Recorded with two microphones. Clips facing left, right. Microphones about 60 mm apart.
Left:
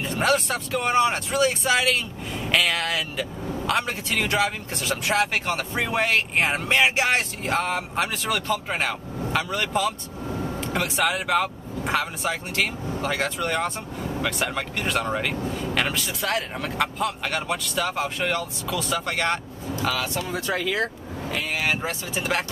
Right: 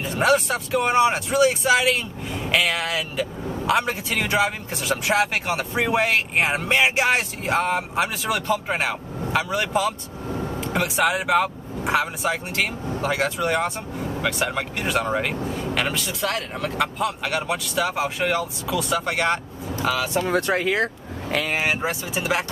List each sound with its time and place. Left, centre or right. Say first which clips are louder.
0.0 s speech: right 3 dB; centre
20.2 s speech: right 6 dB; right
20.5 s speech: right 3 dB; right
21.8 s speech: right 3 dB; centre